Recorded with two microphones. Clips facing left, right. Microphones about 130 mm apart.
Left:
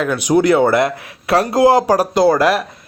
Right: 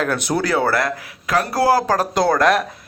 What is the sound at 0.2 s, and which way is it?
Speech, 20° left (ahead or behind).